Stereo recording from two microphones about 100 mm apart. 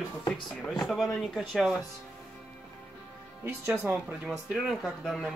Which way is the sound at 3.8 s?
15° right (ahead or behind).